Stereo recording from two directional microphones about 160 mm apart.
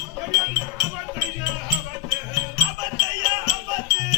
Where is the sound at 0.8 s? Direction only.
20° right (ahead or behind).